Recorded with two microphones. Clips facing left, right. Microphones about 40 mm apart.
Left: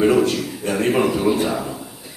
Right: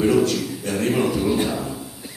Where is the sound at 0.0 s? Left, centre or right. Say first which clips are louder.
Left 2 dB; left.